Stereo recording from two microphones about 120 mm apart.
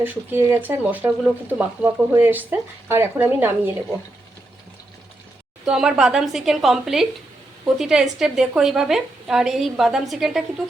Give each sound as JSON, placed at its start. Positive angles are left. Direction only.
{"t": 0.0, "sound": "speech", "side_deg": -15}
{"t": 5.6, "sound": "a woman's voice", "side_deg": -5}